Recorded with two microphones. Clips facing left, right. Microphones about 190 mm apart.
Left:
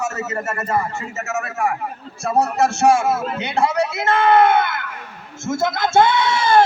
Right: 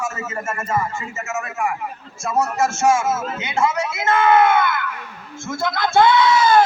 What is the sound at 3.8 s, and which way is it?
A man's voice, 60° left (ahead or behind).